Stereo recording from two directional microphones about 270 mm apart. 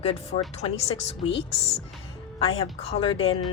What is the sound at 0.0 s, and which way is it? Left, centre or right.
Speech, left.